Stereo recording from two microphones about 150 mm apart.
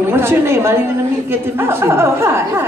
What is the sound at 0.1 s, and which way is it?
A woman's voice, 15° right (ahead or behind).